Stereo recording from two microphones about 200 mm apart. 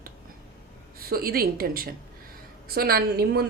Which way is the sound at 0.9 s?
50° right (ahead or behind).